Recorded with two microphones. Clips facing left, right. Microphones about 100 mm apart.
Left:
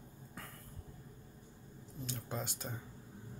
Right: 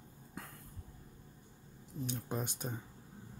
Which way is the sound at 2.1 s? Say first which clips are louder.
Right 2 dB; 15° right (ahead or behind).